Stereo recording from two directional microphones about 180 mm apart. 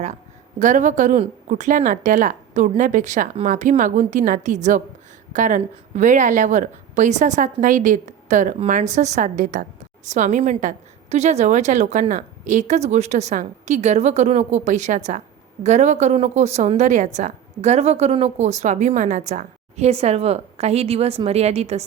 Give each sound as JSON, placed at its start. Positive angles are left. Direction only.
{"t": 0.6, "sound": "a woman's voice", "side_deg": -40}